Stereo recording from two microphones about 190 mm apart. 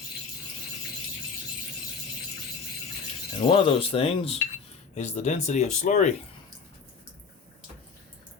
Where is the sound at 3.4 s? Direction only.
30° left (ahead or behind).